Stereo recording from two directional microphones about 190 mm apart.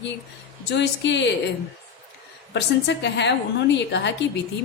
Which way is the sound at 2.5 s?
65° left (ahead or behind).